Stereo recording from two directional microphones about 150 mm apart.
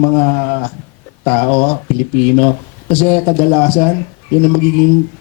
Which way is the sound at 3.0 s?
15° left (ahead or behind).